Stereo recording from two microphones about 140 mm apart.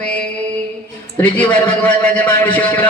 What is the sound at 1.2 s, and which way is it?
A woman's voice, 10° left (ahead or behind).